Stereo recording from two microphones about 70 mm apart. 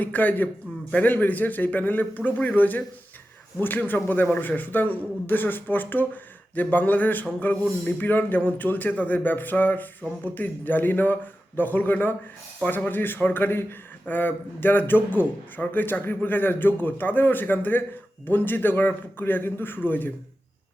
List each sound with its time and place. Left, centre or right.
0.0 s a man's voice: left